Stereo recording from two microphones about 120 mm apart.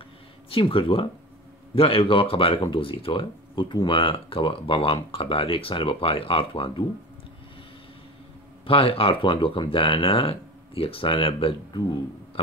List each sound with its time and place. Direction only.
0.5 s speech: 50° left (ahead or behind)
8.6 s speech: 50° left (ahead or behind)